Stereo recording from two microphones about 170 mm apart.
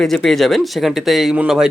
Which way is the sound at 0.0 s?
Centre (ahead or behind).